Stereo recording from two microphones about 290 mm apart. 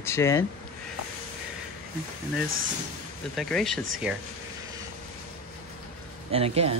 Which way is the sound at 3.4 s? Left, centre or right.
Centre.